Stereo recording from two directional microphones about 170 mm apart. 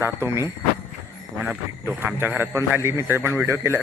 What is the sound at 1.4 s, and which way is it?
Speech, 5° right (ahead or behind).